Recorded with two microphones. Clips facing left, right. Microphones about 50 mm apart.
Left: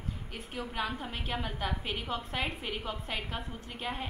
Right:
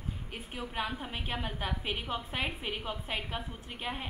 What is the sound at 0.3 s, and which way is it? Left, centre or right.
A woman's voice, centre.